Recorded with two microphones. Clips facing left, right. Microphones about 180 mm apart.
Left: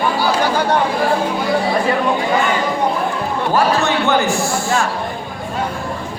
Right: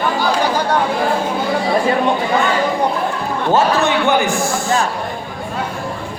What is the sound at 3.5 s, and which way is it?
Speech, 15° right (ahead or behind).